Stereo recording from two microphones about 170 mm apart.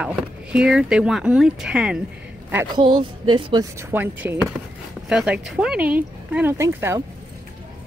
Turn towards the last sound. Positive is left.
turn(degrees=-15)  # may be behind; listen again after turning